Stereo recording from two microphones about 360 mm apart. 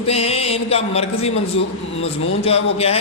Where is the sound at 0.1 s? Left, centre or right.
Centre.